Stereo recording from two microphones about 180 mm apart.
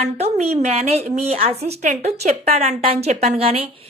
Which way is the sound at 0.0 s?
35° right (ahead or behind).